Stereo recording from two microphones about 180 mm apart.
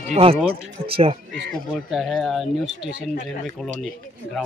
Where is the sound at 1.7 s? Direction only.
Centre (ahead or behind).